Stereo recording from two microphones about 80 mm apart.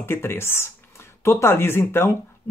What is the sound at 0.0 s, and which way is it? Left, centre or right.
Speech, left.